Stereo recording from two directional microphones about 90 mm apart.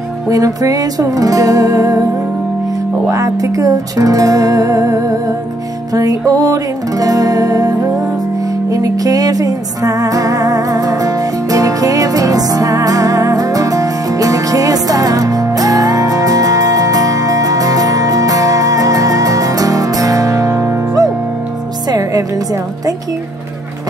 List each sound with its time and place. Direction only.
0.3 s music: 40° right (ahead or behind)
3.1 s music: 40° right (ahead or behind)